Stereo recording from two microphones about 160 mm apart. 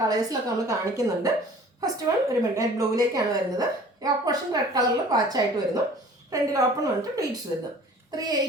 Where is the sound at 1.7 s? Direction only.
20° right (ahead or behind).